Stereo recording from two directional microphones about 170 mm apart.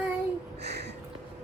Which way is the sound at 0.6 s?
75° right (ahead or behind).